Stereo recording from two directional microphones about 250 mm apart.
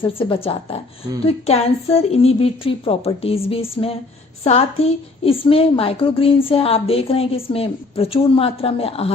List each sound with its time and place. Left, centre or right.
0.0 s a woman's voice: left